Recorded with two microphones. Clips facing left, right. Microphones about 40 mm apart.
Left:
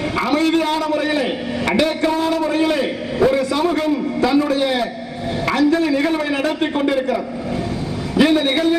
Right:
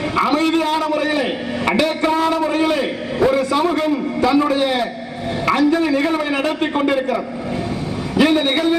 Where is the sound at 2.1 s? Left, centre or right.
Right.